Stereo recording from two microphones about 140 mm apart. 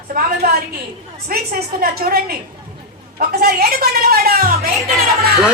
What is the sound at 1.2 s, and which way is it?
A woman's voice, 90° right.